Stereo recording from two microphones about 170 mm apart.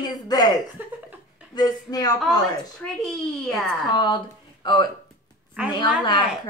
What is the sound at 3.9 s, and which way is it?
Speech, 25° left (ahead or behind).